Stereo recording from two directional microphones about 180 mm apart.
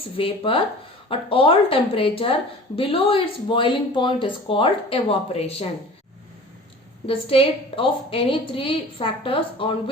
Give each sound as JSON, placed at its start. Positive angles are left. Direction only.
{"t": 0.0, "sound": "a woman's voice", "side_deg": 30}
{"t": 7.1, "sound": "a woman's voice", "side_deg": 30}